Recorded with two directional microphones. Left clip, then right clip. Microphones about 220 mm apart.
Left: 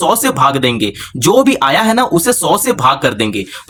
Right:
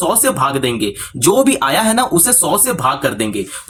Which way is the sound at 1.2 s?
20° left (ahead or behind).